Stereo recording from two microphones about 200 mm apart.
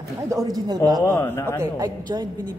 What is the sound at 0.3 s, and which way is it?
Speech, 15° right (ahead or behind).